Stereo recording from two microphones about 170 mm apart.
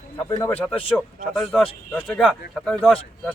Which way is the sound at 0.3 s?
10° left (ahead or behind).